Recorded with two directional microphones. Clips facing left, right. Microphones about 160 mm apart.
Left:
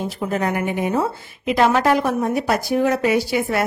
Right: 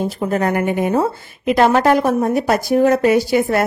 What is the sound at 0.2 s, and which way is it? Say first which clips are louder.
A woman's voice: right 3 dB; 45° right (ahead or behind).